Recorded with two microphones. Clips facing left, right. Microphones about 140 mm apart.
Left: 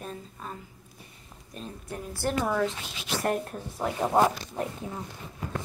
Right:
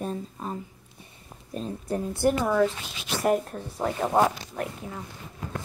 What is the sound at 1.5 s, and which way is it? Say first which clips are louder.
Speech: right 8 dB; 35° right (ahead or behind).